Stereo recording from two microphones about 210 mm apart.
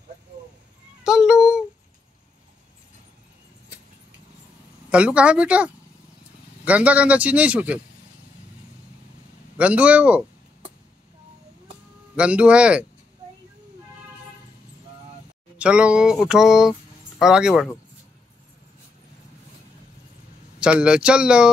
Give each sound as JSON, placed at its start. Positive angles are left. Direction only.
{"t": 1.0, "sound": "a sound", "side_deg": -5}
{"t": 4.8, "sound": "a man's voice", "side_deg": -5}
{"t": 9.6, "sound": "speech", "side_deg": -5}
{"t": 12.2, "sound": "speech", "side_deg": -5}
{"t": 15.5, "sound": "speech", "side_deg": -5}
{"t": 20.5, "sound": "speech", "side_deg": -5}